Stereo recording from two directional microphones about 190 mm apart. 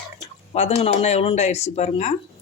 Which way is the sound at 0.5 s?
35° left (ahead or behind).